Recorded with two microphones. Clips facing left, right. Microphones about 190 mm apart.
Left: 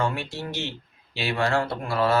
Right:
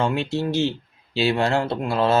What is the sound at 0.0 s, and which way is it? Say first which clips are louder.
Speech: right 5 dB; 25° right (ahead or behind).